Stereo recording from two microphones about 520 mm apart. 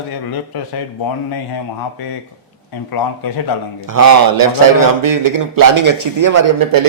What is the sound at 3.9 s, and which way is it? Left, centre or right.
A man's voice, right.